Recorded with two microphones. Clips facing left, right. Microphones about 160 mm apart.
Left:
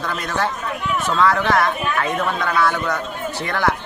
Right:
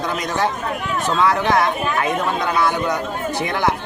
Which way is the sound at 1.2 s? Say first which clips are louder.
Even; 15° right (ahead or behind).